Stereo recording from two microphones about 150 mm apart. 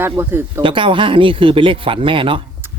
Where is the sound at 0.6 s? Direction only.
35° right (ahead or behind).